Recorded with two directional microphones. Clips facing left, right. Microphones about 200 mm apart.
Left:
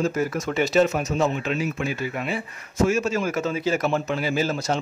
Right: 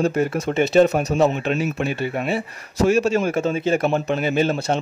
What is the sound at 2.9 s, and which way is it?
Speech, 30° right (ahead or behind).